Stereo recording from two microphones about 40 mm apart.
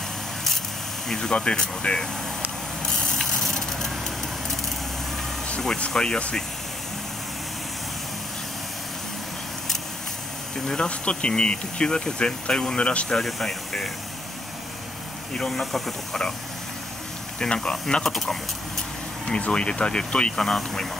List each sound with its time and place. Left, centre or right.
1.0 s speech: centre
3.3 s vehicle: centre
5.8 s speech: left
10.9 s speech: left
13.2 s speech: centre
15.3 s speech: centre
17.4 s speech: left
18.0 s speech: centre
19.2 s speech: left